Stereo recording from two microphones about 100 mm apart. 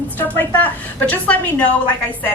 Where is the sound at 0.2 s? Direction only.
20° left (ahead or behind).